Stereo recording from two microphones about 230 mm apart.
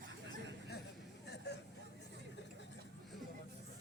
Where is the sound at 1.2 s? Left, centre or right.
Left.